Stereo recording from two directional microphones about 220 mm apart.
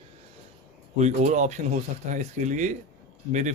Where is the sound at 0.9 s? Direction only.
30° right (ahead or behind).